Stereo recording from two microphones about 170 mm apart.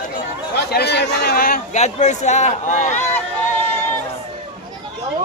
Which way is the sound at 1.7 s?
45° left (ahead or behind).